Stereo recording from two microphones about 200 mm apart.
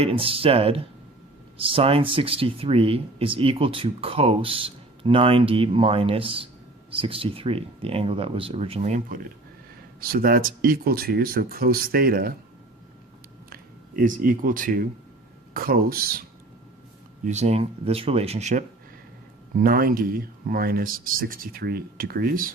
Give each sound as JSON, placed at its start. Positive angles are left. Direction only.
{"t": 0.0, "sound": "speech", "side_deg": -25}
{"t": 13.5, "sound": "speech", "side_deg": -45}
{"t": 17.2, "sound": "speech", "side_deg": -35}
{"t": 19.6, "sound": "speech", "side_deg": -45}